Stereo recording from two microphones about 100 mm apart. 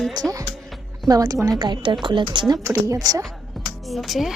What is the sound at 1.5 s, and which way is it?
Speech, 50° right (ahead or behind).